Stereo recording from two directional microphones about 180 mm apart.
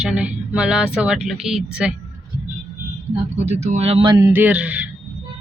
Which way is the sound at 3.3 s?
40° right (ahead or behind).